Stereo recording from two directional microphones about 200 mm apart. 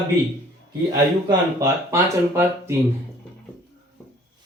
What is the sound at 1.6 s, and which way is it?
Speech, 15° right (ahead or behind).